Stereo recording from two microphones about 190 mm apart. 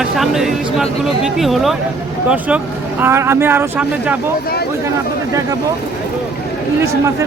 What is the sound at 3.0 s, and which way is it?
Speech, 15° right (ahead or behind).